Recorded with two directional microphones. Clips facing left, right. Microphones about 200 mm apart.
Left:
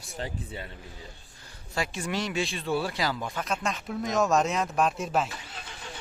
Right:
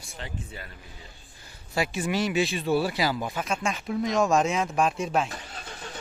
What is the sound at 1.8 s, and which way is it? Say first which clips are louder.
Speech: right 4 dB; 5° right (ahead or behind).